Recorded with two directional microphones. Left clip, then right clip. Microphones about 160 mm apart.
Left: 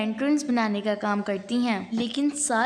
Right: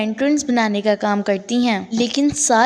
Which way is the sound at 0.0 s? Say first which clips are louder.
Right 7 dB; 30° right (ahead or behind).